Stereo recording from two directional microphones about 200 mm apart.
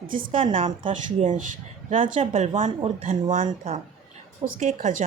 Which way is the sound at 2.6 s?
40° right (ahead or behind).